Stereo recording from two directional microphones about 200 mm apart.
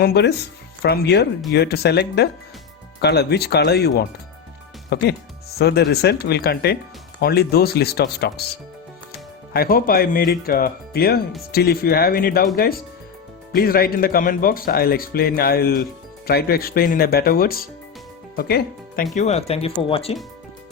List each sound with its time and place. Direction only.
0.0 s speech: 55° left (ahead or behind)
9.5 s speech: 50° left (ahead or behind)
19.1 s speech: 35° left (ahead or behind)